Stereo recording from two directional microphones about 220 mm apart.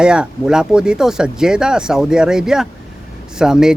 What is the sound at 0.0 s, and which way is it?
Speech, 5° right (ahead or behind).